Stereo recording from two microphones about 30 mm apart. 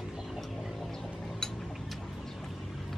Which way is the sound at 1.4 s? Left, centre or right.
Centre.